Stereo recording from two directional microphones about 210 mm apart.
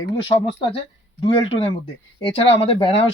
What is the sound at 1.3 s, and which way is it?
Speech, 20° left (ahead or behind).